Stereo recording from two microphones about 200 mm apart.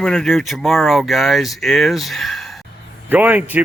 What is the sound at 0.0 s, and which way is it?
A man's voice, centre (ahead or behind).